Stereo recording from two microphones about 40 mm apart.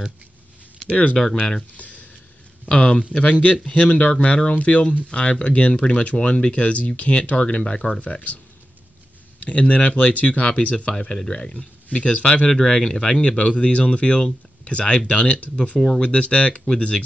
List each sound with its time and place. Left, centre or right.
0.8 s speech: left
1.1 s speech: left
1.8 s a sound: left
2.7 s speech: left
9.4 s speech: left
11.1 s speech: centre
12.4 s speech: centre